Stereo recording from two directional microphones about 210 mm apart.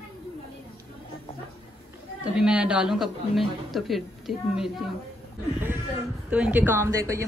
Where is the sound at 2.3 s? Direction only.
5° right (ahead or behind).